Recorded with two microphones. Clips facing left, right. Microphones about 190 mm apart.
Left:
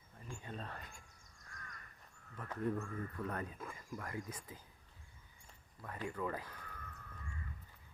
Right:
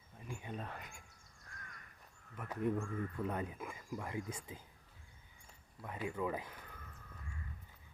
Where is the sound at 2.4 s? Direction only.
10° right (ahead or behind).